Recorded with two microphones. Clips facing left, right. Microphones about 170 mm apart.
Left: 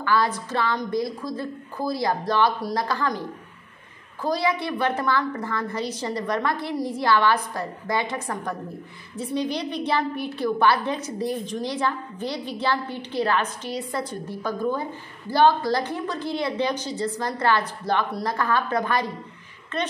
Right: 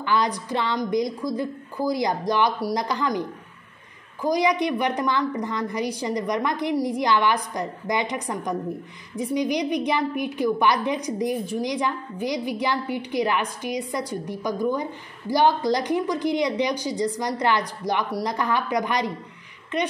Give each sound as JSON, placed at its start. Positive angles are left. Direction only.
{"t": 0.0, "sound": "a woman's voice", "side_deg": -20}